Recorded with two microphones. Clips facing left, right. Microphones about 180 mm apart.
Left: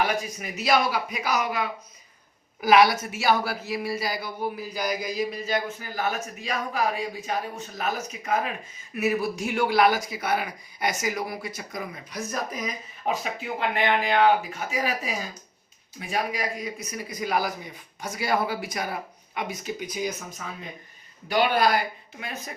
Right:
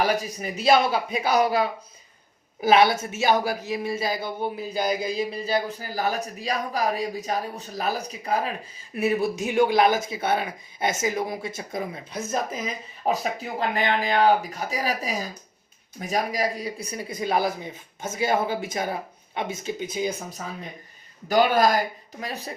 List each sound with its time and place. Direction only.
0.0 s a woman's voice: 35° right (ahead or behind)